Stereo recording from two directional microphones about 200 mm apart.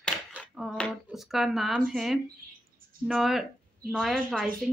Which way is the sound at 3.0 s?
Centre (ahead or behind).